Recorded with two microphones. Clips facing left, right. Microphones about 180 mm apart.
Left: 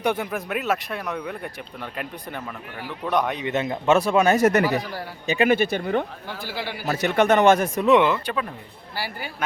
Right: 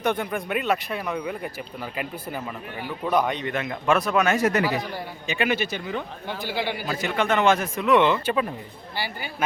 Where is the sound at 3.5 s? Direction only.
25° left (ahead or behind).